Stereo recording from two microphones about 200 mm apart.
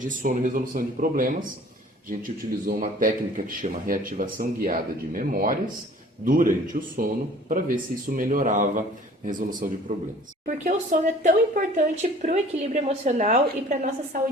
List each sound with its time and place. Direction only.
0.0 s a man's voice: 40° right (ahead or behind)